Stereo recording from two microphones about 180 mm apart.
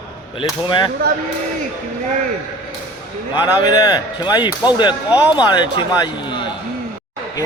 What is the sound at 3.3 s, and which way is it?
Speech, 25° left (ahead or behind).